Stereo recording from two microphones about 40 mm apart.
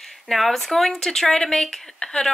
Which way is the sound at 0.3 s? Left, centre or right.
Centre.